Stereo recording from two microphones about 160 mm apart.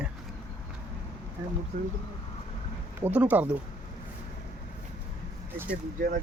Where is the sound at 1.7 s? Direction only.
60° right (ahead or behind).